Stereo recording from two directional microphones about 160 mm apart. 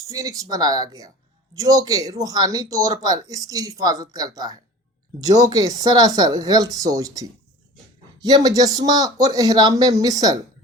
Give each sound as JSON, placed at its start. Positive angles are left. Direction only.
{"t": 0.0, "sound": "speech", "side_deg": -20}